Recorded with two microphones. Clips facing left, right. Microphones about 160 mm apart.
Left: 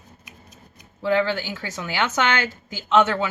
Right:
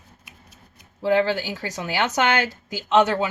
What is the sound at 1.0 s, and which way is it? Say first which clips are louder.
Speech: right 1 dB; 15° right (ahead or behind).